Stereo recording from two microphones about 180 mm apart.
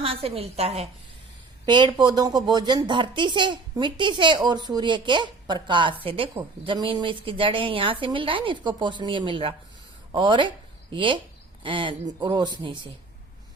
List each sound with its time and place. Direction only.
0.0 s a woman's voice: 35° right (ahead or behind)
1.6 s a woman's voice: 25° right (ahead or behind)